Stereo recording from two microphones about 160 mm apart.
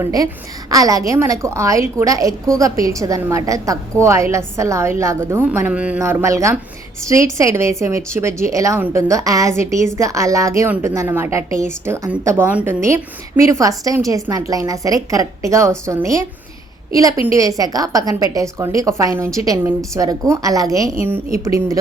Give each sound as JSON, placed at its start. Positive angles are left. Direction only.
{"t": 0.0, "sound": "a woman's voice", "side_deg": -25}